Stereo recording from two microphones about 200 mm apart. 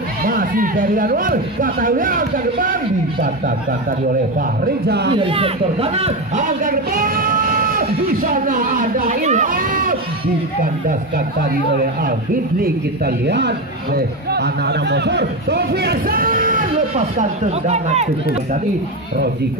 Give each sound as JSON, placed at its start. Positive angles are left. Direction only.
{"t": 0.2, "sound": "a man's voice", "side_deg": -45}
{"t": 5.1, "sound": "a man's voice", "side_deg": -25}
{"t": 12.6, "sound": "a man's voice", "side_deg": -55}